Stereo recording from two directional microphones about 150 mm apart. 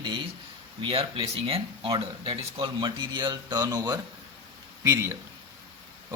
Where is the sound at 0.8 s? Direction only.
35° right (ahead or behind); by 5.1 s 20° right (ahead or behind).